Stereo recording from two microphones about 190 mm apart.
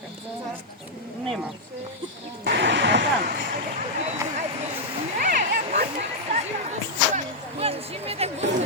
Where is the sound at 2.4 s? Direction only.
65° right (ahead or behind).